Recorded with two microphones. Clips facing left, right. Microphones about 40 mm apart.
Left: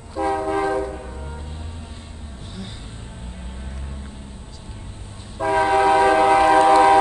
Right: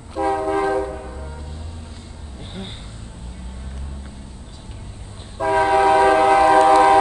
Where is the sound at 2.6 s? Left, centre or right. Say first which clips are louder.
Right 2 dB; right.